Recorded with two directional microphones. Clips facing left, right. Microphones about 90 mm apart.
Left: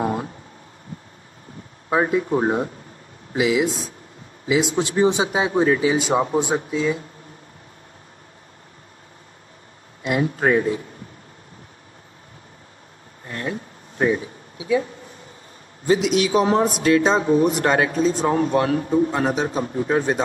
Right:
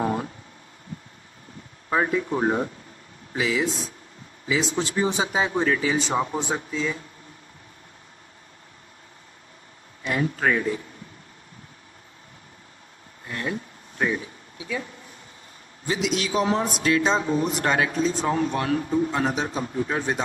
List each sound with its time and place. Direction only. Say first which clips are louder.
0.0 s a sound: left 2 dB; 25° left (ahead or behind)
1.9 s speech: left 4 dB; 20° left (ahead or behind)
4.9 s speech: left 6 dB; 25° left (ahead or behind)
10.2 s speech: left 4 dB; 30° left (ahead or behind)
13.3 s a sound: left 1 dB; 35° left (ahead or behind)
15.9 s speech: left 7 dB; 45° left (ahead or behind)